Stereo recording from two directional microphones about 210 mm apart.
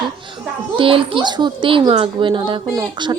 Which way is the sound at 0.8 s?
25° right (ahead or behind).